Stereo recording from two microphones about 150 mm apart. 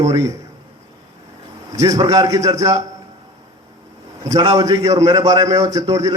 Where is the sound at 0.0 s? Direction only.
20° right (ahead or behind).